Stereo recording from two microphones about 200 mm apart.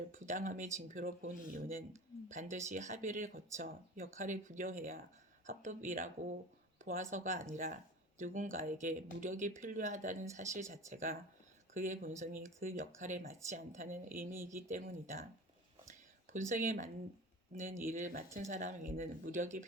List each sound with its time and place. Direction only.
0.1 s speech: 40° right (ahead or behind)
2.3 s speech: 40° right (ahead or behind)
14.3 s speech: 10° right (ahead or behind)
14.5 s speech: 40° right (ahead or behind)
15.9 s a sound: 35° right (ahead or behind)
17.5 s speech: 40° right (ahead or behind)